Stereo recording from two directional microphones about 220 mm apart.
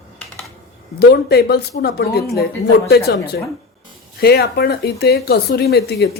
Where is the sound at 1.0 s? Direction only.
45° left (ahead or behind).